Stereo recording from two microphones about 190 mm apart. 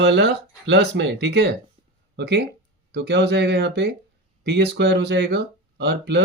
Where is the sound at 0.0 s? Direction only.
65° right (ahead or behind).